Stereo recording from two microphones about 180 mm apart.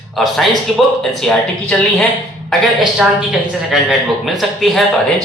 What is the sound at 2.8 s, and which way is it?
A man's voice, 5° right (ahead or behind).